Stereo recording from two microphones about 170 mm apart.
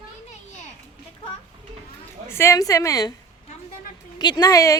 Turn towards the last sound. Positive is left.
turn(degrees=20)  # may be behind; listen again after turning